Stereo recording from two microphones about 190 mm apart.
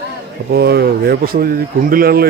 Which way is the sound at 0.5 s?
55° right (ahead or behind).